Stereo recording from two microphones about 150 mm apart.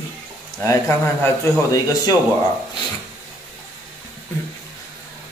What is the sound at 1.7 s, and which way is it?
Speech, 25° left (ahead or behind).